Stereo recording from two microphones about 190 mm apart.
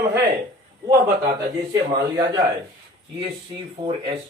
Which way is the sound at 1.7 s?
20° right (ahead or behind).